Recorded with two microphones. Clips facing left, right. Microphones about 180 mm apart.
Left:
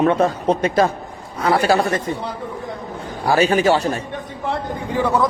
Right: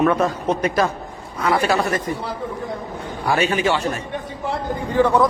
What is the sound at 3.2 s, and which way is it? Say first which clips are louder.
Speech: left 4 dB; 35° left (ahead or behind).